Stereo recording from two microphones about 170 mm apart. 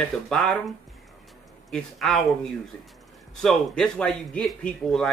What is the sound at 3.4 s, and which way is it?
A man's voice, 5° left (ahead or behind).